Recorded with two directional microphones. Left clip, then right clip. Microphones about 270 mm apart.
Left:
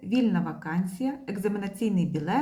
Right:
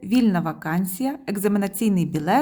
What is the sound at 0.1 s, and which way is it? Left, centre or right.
Speech, right.